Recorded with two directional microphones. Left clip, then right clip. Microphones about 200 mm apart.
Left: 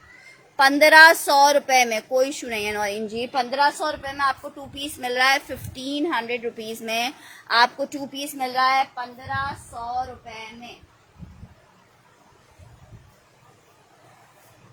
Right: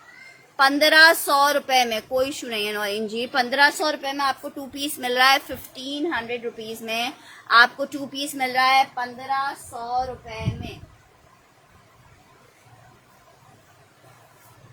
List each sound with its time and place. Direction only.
0.5 s a woman's voice: 5° left (ahead or behind); by 3.4 s 10° right (ahead or behind)
3.5 s a woman's voice: 25° right (ahead or behind)
5.7 s a woman's voice: 10° left (ahead or behind); by 9.0 s 20° right (ahead or behind)